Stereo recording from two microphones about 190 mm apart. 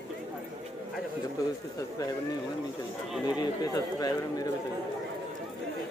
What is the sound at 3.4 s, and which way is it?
Speech, 20° left (ahead or behind).